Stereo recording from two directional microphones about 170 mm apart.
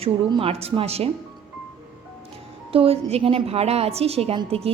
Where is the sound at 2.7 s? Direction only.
35° right (ahead or behind).